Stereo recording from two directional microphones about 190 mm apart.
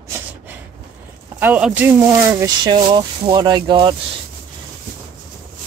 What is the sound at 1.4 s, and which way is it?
Speech, 5° right (ahead or behind).